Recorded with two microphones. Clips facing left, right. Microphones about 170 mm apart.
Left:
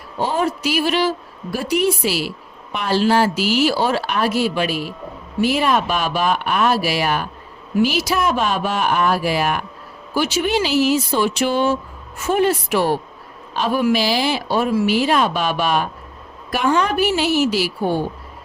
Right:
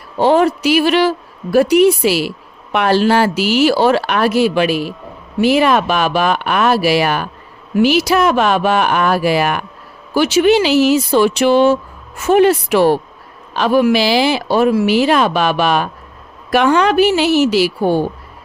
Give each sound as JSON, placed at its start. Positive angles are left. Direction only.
{"t": 0.2, "sound": "a sound", "side_deg": -75}
{"t": 1.5, "sound": "speech", "side_deg": -70}
{"t": 16.5, "sound": "speech", "side_deg": -75}